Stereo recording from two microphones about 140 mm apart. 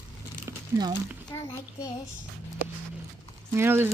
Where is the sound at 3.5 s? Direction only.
15° right (ahead or behind).